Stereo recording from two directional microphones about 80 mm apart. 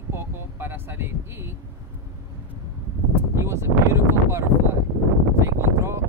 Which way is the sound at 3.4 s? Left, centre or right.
Right.